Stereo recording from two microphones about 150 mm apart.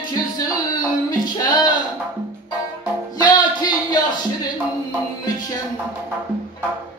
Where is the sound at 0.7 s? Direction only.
30° left (ahead or behind).